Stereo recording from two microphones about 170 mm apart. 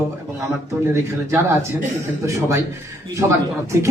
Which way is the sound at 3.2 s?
15° right (ahead or behind).